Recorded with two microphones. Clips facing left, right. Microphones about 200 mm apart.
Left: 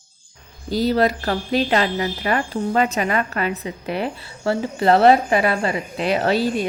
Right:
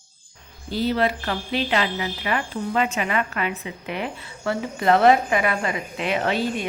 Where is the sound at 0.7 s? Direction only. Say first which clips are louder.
Left 4 dB; 40° left (ahead or behind).